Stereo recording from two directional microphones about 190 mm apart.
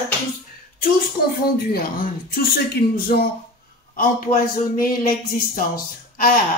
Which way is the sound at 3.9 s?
45° left (ahead or behind).